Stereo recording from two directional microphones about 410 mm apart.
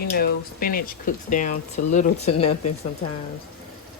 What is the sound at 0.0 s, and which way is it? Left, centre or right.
Speech, left.